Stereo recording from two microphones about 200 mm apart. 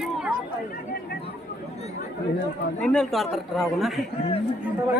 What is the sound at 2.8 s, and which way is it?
A man's voice, 5° left (ahead or behind).